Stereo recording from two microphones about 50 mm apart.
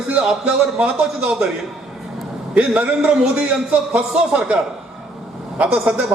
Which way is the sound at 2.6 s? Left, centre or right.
Right.